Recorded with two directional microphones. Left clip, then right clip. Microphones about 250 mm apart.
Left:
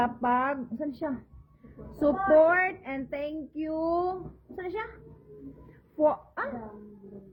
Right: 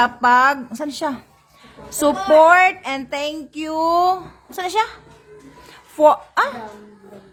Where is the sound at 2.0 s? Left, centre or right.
Right.